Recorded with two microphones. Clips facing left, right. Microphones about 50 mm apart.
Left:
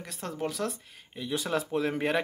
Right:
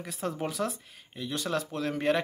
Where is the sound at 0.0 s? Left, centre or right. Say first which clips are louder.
Right 1 dB; centre.